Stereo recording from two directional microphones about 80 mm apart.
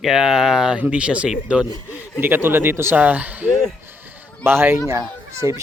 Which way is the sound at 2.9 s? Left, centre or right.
Centre.